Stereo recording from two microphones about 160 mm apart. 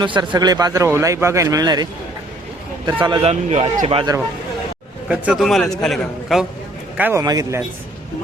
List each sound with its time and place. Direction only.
0.0 s a man's voice: 30° right (ahead or behind)
3.2 s speech: 45° right (ahead or behind)
5.0 s speech: 5° right (ahead or behind)
6.9 s a man's voice: 10° right (ahead or behind)
7.2 s a man's voice: 20° right (ahead or behind)